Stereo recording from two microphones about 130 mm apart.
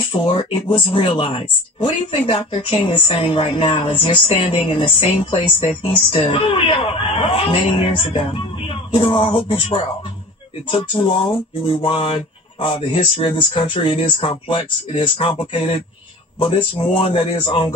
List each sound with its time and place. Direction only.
0.1 s speech: 45° left (ahead or behind)